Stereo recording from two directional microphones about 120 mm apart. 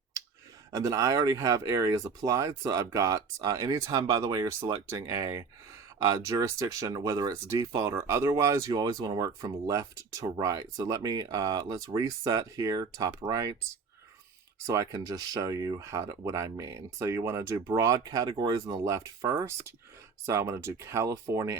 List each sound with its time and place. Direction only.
0.7 s speech: 30° right (ahead or behind)
14.7 s speech: 30° right (ahead or behind)